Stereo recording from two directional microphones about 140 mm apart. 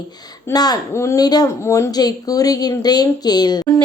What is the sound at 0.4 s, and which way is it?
A woman's voice, 30° left (ahead or behind).